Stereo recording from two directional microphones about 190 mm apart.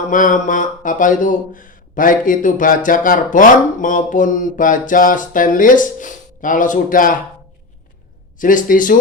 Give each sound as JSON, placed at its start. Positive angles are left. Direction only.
{"t": 0.1, "sound": "speech", "side_deg": 45}
{"t": 8.4, "sound": "speech", "side_deg": 45}